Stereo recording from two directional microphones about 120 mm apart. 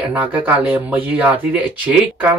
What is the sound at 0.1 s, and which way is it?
Speech, 15° right (ahead or behind).